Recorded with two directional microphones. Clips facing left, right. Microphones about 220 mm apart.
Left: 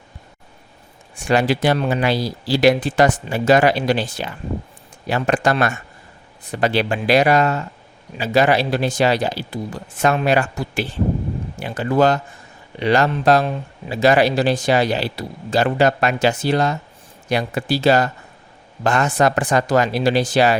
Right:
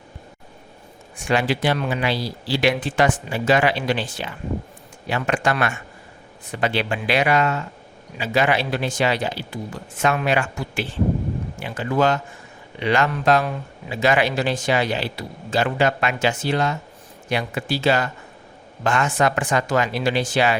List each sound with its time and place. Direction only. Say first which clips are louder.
1.2 s speech: left 4 dB; 40° left (ahead or behind)